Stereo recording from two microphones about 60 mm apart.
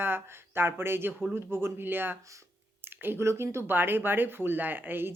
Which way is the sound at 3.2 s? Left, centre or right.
Right.